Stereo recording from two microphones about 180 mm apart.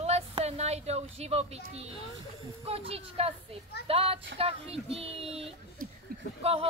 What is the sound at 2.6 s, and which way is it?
A woman's voice, 35° right (ahead or behind).